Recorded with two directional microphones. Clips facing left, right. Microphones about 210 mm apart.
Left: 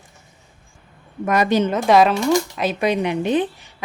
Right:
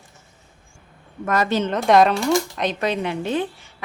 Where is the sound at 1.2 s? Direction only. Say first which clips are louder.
Left 3 dB; 15° left (ahead or behind).